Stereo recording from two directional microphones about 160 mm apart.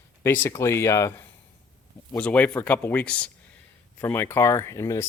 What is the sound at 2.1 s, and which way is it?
Speech, 10° left (ahead or behind).